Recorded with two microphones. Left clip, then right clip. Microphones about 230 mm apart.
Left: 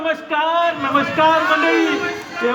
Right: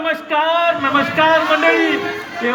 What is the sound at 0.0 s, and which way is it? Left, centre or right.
A man's voice, right.